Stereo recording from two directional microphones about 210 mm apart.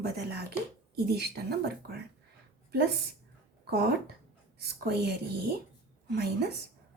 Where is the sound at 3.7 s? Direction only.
50° right (ahead or behind).